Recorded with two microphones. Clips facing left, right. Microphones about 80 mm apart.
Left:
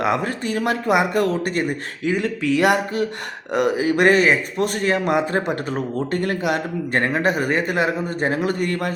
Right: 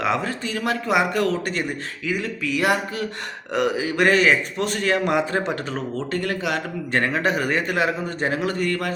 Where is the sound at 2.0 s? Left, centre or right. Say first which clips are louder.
Left 5 dB; left.